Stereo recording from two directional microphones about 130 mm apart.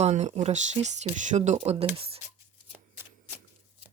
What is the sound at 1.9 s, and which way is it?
Speech, 45° right (ahead or behind).